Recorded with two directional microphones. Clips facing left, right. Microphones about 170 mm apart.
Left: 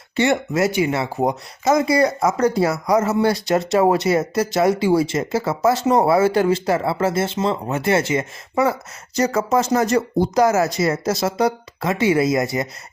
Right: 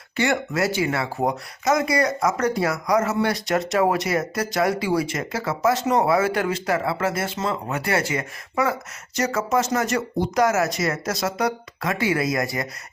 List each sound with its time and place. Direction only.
0.2 s speech: 20° left (ahead or behind)